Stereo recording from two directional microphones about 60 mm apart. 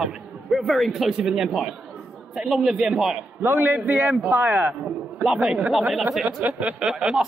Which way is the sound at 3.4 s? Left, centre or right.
Right.